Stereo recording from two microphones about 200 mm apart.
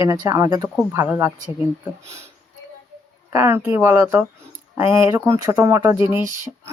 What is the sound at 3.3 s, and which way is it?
Speech, 15° right (ahead or behind).